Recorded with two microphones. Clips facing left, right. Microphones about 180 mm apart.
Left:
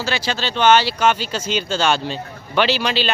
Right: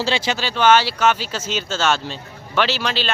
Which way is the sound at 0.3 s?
10° right (ahead or behind).